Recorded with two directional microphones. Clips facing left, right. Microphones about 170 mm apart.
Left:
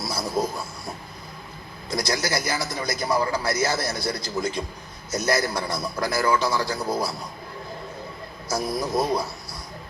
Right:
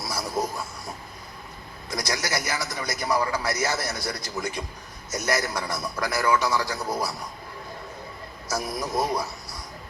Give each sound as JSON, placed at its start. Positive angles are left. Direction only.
{"t": 0.0, "sound": "a sound", "side_deg": 25}
{"t": 1.9, "sound": "a man's voice", "side_deg": 25}
{"t": 8.4, "sound": "a man's voice", "side_deg": 25}